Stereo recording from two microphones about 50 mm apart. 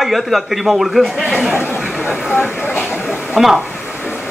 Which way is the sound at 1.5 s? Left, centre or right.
Left.